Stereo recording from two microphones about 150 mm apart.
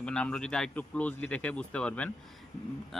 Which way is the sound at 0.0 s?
5° left (ahead or behind).